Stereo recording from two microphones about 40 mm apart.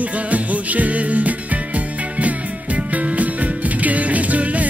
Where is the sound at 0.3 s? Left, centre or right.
Right.